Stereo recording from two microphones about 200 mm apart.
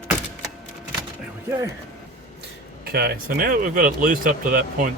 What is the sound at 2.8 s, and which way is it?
Speech, 50° right (ahead or behind).